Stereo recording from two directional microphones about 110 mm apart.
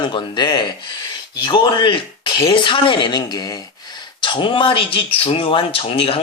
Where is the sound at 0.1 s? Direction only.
45° left (ahead or behind).